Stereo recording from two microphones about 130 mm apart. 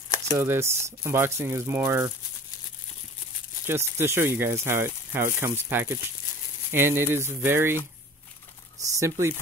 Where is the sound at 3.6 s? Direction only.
20° right (ahead or behind).